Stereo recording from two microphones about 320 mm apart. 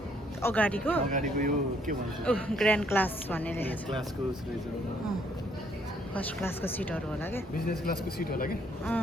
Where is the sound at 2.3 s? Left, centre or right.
Centre.